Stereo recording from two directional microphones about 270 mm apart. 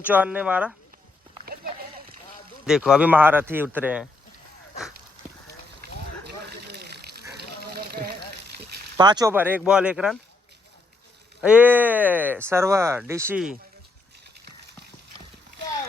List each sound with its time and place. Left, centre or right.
0.0 s speech: centre
1.5 s a sound: right
2.6 s speech: centre
6.2 s a sound: right
9.0 s speech: centre
11.3 s speech: centre